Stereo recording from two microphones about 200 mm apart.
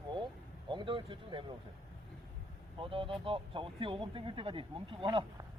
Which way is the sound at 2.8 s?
25° right (ahead or behind).